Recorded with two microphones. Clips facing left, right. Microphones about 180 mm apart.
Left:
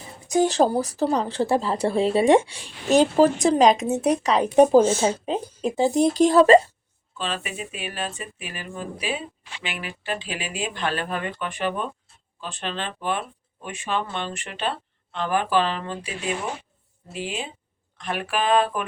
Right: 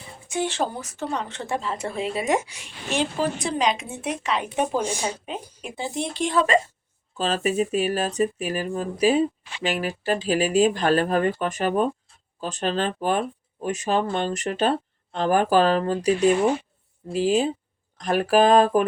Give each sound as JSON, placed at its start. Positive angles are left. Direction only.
{"t": 0.0, "sound": "a woman's voice", "side_deg": 40}
{"t": 7.2, "sound": "speech", "side_deg": -40}